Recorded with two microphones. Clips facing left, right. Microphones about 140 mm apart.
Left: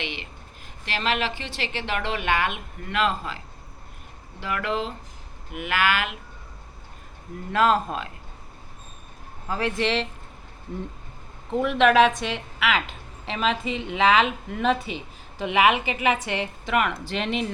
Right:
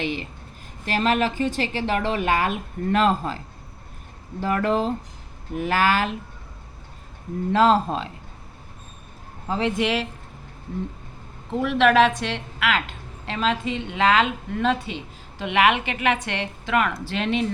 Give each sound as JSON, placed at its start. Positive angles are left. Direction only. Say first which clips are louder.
{"t": 0.0, "sound": "speech", "louder": "right 7 dB", "side_deg": -40}
{"t": 7.5, "sound": "speech", "louder": "right 3 dB", "side_deg": -30}
{"t": 9.5, "sound": "speech", "louder": "right 2 dB", "side_deg": -20}
{"t": 11.5, "sound": "a woman's voice", "louder": "even", "side_deg": 0}